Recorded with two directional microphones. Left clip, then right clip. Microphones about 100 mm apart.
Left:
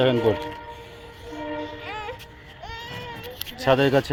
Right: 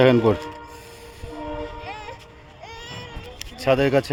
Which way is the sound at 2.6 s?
40° right (ahead or behind).